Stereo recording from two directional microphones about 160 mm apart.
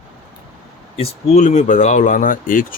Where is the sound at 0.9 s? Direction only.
40° left (ahead or behind).